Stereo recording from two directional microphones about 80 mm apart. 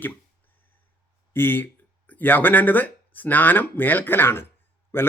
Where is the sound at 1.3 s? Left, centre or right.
Left.